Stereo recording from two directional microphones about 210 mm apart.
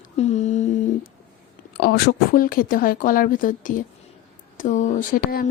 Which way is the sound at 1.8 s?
50° left (ahead or behind).